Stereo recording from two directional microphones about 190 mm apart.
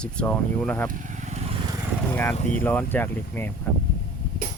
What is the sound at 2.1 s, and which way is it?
Speech, 10° left (ahead or behind).